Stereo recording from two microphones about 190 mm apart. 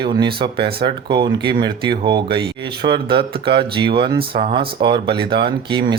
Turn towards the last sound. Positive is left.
turn(degrees=-25)  # may be behind; listen again after turning